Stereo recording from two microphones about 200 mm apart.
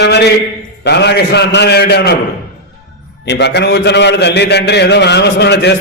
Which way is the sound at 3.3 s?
55° left (ahead or behind).